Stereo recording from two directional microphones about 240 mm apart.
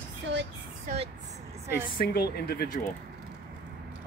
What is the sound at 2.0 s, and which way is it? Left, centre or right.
Speech, left.